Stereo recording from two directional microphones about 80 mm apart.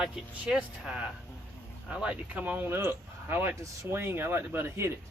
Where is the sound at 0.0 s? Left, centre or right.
Centre.